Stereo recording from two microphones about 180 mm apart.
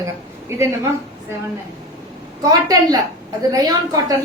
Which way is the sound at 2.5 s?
20° right (ahead or behind).